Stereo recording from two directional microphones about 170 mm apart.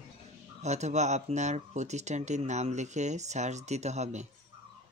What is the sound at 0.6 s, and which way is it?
Speech, 40° right (ahead or behind).